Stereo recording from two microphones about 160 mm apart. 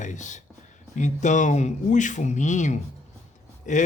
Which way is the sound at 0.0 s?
50° left (ahead or behind).